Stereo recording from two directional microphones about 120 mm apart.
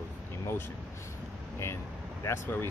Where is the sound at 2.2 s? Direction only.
20° left (ahead or behind).